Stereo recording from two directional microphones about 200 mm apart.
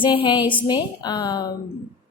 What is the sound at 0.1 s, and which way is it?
A woman's voice, 25° left (ahead or behind).